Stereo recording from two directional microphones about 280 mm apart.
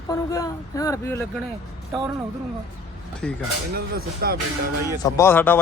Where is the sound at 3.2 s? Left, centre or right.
Centre.